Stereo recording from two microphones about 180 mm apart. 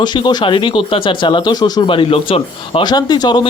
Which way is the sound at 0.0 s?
25° left (ahead or behind).